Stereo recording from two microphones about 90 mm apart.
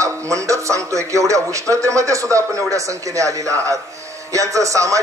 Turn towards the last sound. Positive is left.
turn(degrees=-35)  # may be behind; listen again after turning